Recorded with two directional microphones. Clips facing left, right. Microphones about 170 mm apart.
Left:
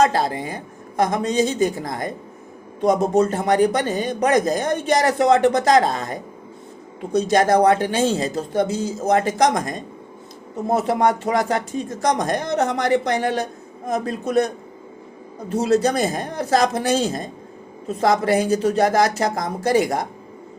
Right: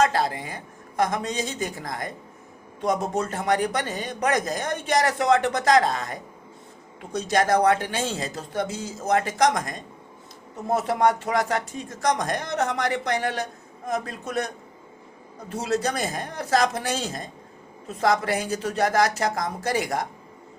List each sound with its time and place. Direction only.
0.0 s speech: 30° left (ahead or behind)
2.8 s speech: 35° left (ahead or behind)
15.5 s speech: 30° left (ahead or behind)